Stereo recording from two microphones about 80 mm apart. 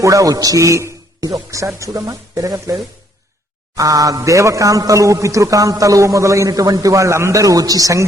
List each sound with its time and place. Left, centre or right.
0.0 s a man's voice: right
3.8 s a man's voice: right